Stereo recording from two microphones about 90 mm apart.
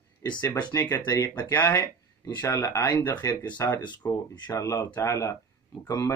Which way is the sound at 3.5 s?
25° left (ahead or behind).